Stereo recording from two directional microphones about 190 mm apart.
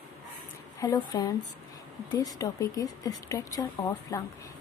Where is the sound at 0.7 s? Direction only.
20° left (ahead or behind).